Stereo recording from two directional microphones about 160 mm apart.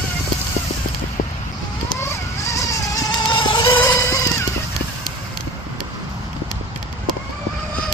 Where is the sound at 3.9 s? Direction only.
20° left (ahead or behind).